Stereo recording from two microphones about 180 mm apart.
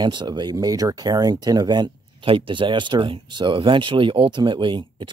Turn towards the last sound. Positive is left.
turn(degrees=-25)  # may be behind; listen again after turning